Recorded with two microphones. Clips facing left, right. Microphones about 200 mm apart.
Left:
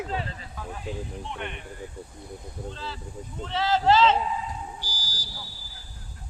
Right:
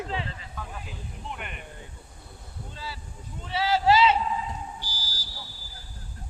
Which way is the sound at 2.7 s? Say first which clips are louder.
Left 4 dB; 10° right (ahead or behind).